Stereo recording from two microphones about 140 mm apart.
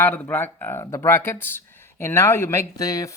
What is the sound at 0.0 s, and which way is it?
Speech, 15° left (ahead or behind).